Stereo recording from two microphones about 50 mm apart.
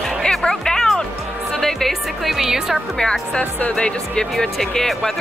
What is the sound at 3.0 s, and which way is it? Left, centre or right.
Speech, centre.